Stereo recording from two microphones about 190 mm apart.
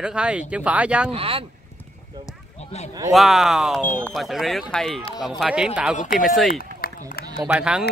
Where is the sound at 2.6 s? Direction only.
35° left (ahead or behind).